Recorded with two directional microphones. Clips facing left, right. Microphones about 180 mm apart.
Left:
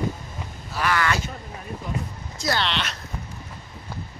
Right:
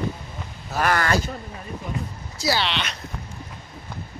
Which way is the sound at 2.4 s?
5° right (ahead or behind).